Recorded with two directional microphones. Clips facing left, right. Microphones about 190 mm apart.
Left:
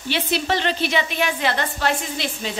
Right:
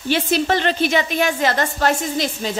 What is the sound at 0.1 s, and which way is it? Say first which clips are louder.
A woman's voice: right 4 dB; 45° right (ahead or behind).